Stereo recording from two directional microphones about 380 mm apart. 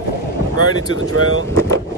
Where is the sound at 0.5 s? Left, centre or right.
Right.